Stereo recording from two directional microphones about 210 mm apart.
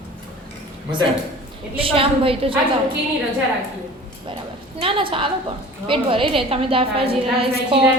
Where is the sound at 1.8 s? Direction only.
25° right (ahead or behind).